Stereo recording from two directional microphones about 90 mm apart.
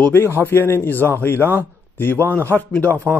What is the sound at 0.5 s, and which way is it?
A man's voice, 25° left (ahead or behind).